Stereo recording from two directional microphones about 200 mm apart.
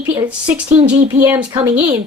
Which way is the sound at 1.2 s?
10° right (ahead or behind).